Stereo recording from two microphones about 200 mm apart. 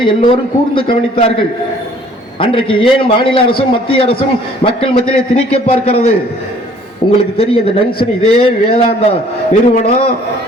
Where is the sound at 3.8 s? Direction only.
30° left (ahead or behind).